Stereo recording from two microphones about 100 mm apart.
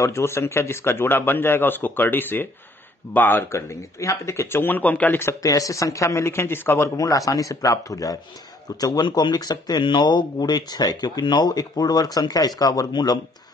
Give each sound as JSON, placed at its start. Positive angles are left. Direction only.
{"t": 0.0, "sound": "speech", "side_deg": 30}
{"t": 5.4, "sound": "speech", "side_deg": 35}
{"t": 7.0, "sound": "speech", "side_deg": 35}